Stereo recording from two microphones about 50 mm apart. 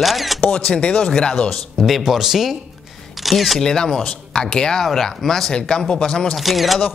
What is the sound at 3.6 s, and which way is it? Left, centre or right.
Speech, centre.